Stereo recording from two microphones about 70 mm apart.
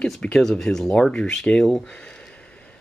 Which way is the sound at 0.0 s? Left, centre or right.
Centre.